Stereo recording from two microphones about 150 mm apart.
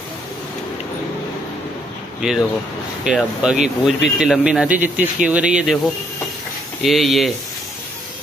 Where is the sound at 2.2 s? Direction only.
5° right (ahead or behind).